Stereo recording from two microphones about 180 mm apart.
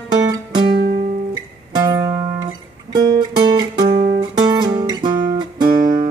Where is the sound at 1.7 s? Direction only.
20° right (ahead or behind).